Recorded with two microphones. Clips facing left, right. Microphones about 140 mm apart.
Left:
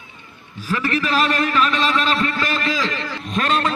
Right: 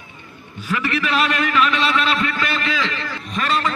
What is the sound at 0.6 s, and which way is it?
A man's voice, 35° left (ahead or behind).